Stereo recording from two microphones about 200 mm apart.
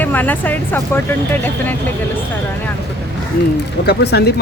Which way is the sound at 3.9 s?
55° left (ahead or behind).